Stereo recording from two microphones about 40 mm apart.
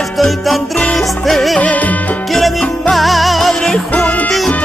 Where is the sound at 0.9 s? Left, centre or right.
Centre.